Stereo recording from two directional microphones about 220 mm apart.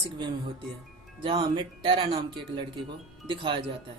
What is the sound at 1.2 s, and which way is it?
Speech, 20° right (ahead or behind).